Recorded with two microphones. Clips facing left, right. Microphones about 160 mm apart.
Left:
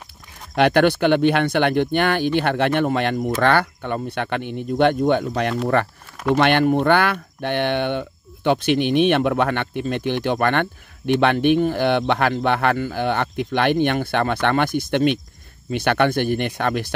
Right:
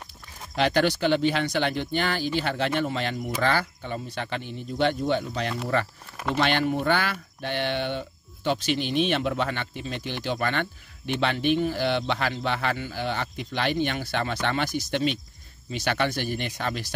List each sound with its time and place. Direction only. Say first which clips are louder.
0.6 s speech: left 7 dB; 60° left (ahead or behind)